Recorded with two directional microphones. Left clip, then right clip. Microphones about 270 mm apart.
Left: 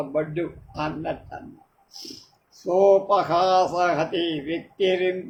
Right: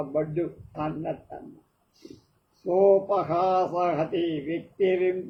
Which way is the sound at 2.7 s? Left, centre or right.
Left.